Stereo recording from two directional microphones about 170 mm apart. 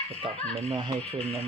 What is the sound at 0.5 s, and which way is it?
Speech, 35° right (ahead or behind).